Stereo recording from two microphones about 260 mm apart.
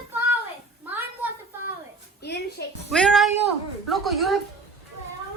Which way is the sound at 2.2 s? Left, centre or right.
Left.